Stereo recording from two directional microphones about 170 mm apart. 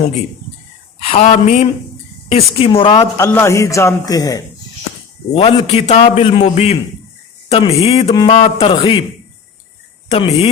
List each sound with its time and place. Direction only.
1.0 s a man's voice: 35° left (ahead or behind)
3.2 s a man's voice: 15° left (ahead or behind)
5.3 s a man's voice: 35° left (ahead or behind)
8.1 s a man's voice: 25° left (ahead or behind)